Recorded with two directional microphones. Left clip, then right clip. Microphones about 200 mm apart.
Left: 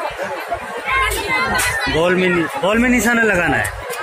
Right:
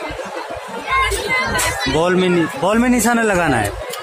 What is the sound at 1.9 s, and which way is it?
A man's voice, 25° right (ahead or behind).